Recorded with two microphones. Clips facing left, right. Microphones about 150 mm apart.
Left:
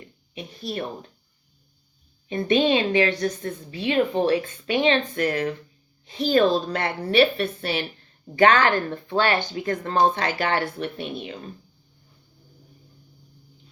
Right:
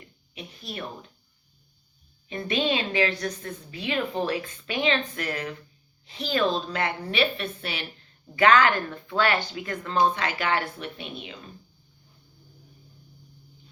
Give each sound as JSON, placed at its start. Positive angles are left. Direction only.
{"t": 0.6, "sound": "speech", "side_deg": 35}
{"t": 2.3, "sound": "a woman's voice", "side_deg": 30}
{"t": 9.8, "sound": "a woman's voice", "side_deg": 40}